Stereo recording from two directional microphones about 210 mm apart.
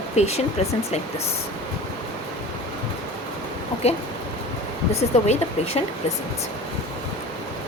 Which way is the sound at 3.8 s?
30° left (ahead or behind).